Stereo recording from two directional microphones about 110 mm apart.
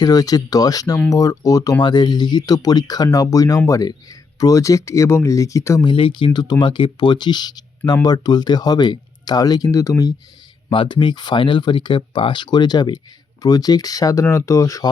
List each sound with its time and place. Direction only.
0.0 s speech: 35° left (ahead or behind)
5.8 s speech: 50° left (ahead or behind); by 9.9 s 35° left (ahead or behind)
10.7 s speech: 50° left (ahead or behind); by 14.8 s 30° left (ahead or behind)